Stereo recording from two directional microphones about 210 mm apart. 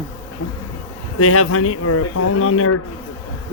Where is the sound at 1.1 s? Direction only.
90° left.